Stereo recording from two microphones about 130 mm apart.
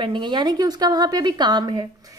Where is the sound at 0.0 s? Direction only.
35° right (ahead or behind).